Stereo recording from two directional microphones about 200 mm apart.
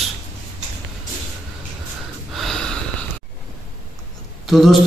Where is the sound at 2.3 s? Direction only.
Centre (ahead or behind).